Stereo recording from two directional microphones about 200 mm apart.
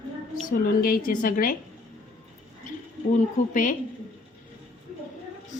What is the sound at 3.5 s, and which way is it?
Speech, 40° left (ahead or behind).